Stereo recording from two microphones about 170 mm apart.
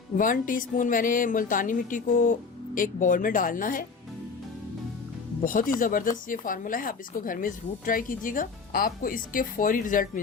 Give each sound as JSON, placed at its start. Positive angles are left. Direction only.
{"t": 0.2, "sound": "speech", "side_deg": 50}
{"t": 5.5, "sound": "speech", "side_deg": 50}